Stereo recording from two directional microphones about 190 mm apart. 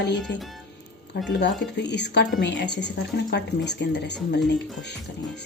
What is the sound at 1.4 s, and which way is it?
Speech, 65° left (ahead or behind).